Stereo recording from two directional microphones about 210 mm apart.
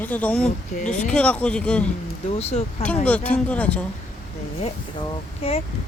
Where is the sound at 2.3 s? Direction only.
30° left (ahead or behind).